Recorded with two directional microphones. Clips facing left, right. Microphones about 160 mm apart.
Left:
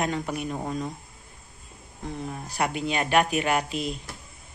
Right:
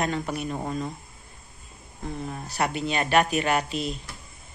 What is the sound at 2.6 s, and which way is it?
Speech, 10° left (ahead or behind).